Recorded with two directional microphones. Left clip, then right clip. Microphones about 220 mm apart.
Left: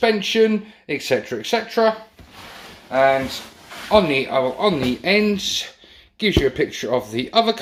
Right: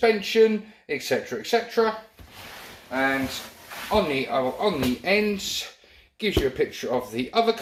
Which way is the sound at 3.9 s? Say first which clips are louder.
Left 7 dB; 35° left (ahead or behind).